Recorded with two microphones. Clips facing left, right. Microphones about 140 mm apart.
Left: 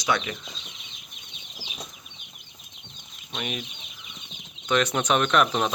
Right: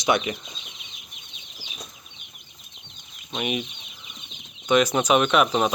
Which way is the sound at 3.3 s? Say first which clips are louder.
Right 5 dB; 15° right (ahead or behind).